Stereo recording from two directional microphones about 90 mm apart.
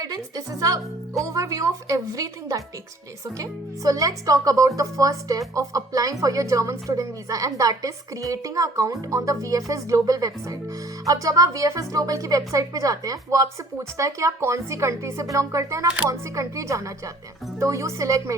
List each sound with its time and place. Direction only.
0.0 s speech: 45° right (ahead or behind)